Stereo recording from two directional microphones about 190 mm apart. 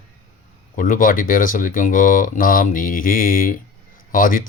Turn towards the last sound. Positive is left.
turn(degrees=45)  # may be behind; listen again after turning